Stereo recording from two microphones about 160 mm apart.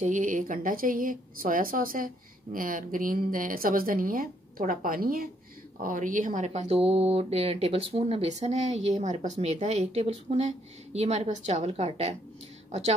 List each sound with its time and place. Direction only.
0.0 s a woman's voice: 50° right (ahead or behind)